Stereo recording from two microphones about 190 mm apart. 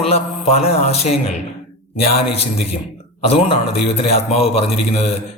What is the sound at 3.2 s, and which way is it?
A man's voice, 30° left (ahead or behind).